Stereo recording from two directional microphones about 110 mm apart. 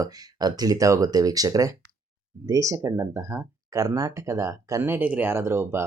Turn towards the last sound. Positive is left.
turn(degrees=-20)  # may be behind; listen again after turning